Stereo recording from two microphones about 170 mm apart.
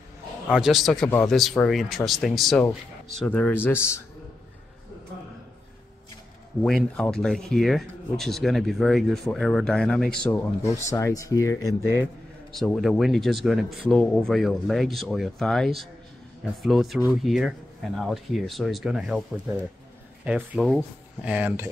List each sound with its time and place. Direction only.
0.5 s speech: 5° right (ahead or behind); by 4.0 s 15° left (ahead or behind)
6.6 s speech: 5° left (ahead or behind)
10.3 s speech: 15° left (ahead or behind)
12.5 s speech: centre (ahead or behind)